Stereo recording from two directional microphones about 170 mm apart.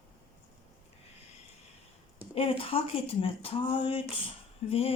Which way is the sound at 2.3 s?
35° left (ahead or behind).